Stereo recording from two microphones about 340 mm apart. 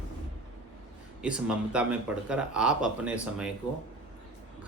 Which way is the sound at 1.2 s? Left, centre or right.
Centre.